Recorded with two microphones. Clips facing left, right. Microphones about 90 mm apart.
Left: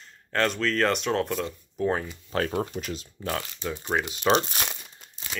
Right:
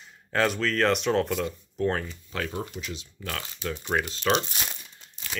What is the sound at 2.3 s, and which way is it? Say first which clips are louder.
Speech: left 5 dB; 40° left (ahead or behind).